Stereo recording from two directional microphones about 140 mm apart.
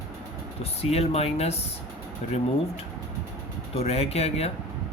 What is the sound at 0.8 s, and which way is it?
Speech, 45° left (ahead or behind).